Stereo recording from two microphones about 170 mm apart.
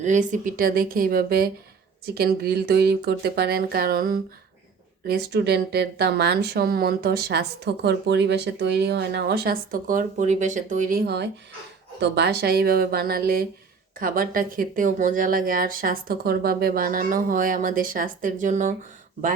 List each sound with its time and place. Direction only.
0.0 s speech: 45° right (ahead or behind)
5.0 s speech: 70° right (ahead or behind)
11.9 s speech: 85° right; by 18.7 s 50° right (ahead or behind)